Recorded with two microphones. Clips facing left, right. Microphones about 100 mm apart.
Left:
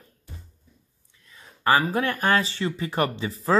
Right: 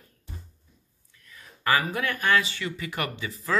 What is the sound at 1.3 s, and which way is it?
Speech, 30° left (ahead or behind).